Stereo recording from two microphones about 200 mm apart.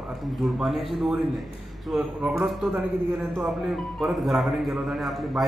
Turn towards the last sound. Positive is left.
turn(degrees=0)  # may be behind; listen again after turning